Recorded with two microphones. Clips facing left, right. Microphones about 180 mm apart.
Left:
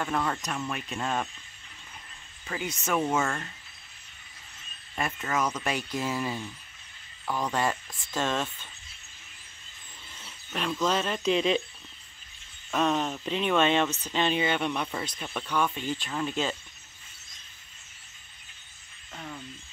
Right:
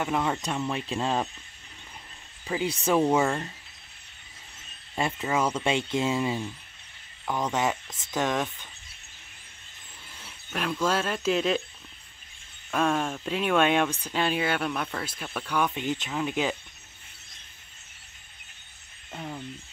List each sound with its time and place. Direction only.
0.0 s speech: 15° right (ahead or behind)
0.4 s speech: 25° right (ahead or behind)
2.6 s speech: 30° right (ahead or behind)
3.1 s speech: 15° right (ahead or behind)
5.0 s speech: 30° right (ahead or behind)
10.1 s speech: 5° right (ahead or behind)
12.7 s speech: 10° right (ahead or behind)
15.5 s speech: 15° right (ahead or behind)